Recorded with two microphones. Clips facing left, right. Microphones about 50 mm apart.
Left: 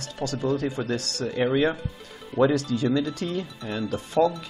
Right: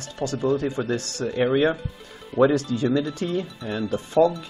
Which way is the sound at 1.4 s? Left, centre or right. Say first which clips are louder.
Right 2 dB; centre.